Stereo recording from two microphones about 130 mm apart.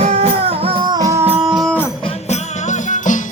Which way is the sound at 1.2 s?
50° right (ahead or behind).